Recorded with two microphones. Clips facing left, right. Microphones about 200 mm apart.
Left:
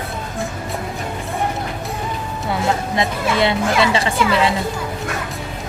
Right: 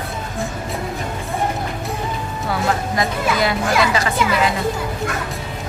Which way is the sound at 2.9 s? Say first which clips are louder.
Left 1 dB; 25° left (ahead or behind).